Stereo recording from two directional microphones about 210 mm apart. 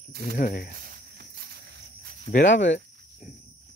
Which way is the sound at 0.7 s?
45° right (ahead or behind).